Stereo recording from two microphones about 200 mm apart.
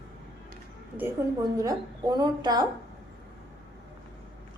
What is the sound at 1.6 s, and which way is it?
A woman's voice, 20° right (ahead or behind).